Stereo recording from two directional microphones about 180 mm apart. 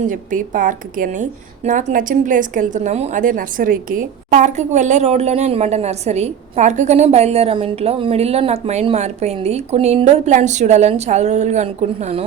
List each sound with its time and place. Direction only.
0.0 s a woman's voice: 45° right (ahead or behind)